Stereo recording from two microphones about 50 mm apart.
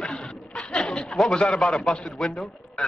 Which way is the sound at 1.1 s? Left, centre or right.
Centre.